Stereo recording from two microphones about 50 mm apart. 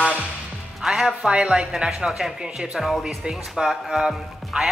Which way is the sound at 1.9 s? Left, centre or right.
Centre.